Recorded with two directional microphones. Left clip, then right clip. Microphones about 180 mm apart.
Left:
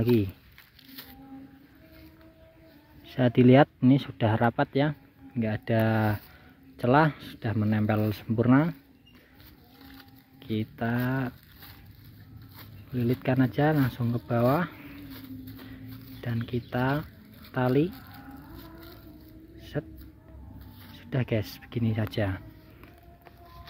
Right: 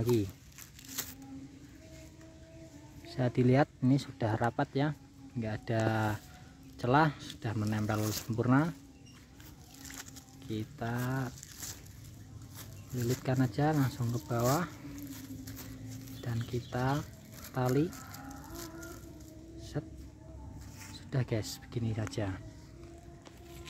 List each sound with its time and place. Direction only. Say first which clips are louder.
3.1 s speech: left 9 dB; 35° left (ahead or behind)
10.5 s speech: left 7 dB; 35° left (ahead or behind)
13.2 s speech: left 7 dB; 35° left (ahead or behind)
16.2 s speech: left 6 dB; 35° left (ahead or behind)
19.7 s speech: left 7 dB; 35° left (ahead or behind)
21.1 s speech: left 6 dB; 35° left (ahead or behind)